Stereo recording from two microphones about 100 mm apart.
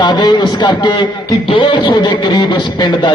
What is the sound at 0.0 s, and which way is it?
A man's voice, 50° left (ahead or behind).